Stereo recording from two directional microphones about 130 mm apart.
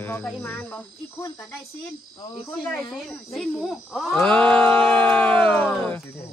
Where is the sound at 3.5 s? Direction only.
Centre (ahead or behind).